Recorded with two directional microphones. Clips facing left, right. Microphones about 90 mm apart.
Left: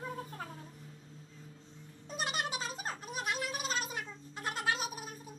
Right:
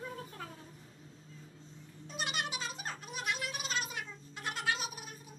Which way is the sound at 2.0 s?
40° left (ahead or behind).